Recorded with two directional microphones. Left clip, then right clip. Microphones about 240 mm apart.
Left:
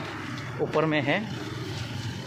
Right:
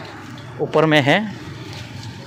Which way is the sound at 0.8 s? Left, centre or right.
Right.